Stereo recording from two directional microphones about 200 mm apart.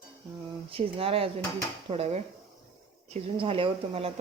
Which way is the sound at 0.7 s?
25° right (ahead or behind).